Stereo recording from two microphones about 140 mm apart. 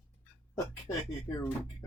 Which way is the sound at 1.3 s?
15° left (ahead or behind).